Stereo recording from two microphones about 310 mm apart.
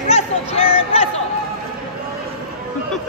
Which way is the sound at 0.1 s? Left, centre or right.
Centre.